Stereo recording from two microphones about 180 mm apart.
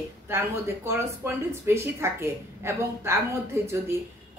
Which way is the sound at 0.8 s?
15° right (ahead or behind).